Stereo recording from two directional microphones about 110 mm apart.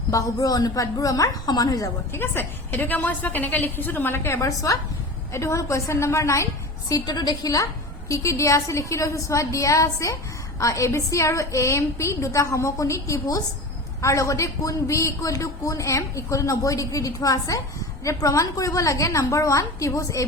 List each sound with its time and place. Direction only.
0.1 s a woman's voice: 35° left (ahead or behind)
2.1 s a woman's voice: 20° left (ahead or behind)
7.0 s a man's voice: 40° left (ahead or behind)